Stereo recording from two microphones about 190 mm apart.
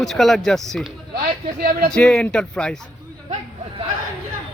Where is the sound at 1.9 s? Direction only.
5° left (ahead or behind).